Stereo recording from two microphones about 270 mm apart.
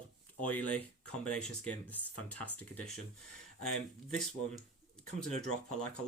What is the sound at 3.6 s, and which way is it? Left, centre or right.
Speech, left.